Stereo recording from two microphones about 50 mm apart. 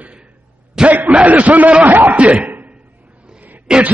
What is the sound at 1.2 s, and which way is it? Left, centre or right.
A man's voice, right.